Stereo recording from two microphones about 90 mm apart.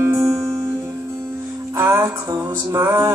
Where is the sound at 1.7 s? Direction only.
25° right (ahead or behind).